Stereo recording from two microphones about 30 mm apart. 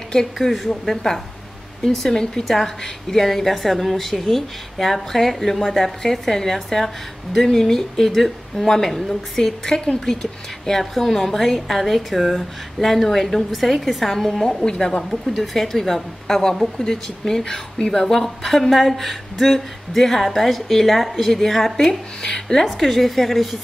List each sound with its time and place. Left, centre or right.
0.4 s a woman's voice: centre
1.9 s a woman's voice: centre
13.5 s a woman's voice: centre
14.1 s a woman's voice: centre
14.6 s speech: left
15.2 s a woman's voice: centre
20.0 s a woman's voice: centre
20.2 s a woman's voice: centre
22.7 s a woman's voice: centre